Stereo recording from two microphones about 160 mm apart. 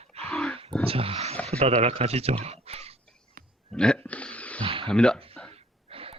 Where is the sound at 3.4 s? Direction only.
65° right (ahead or behind).